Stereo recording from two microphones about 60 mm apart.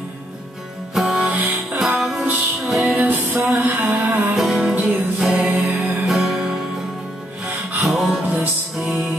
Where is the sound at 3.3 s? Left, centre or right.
Right.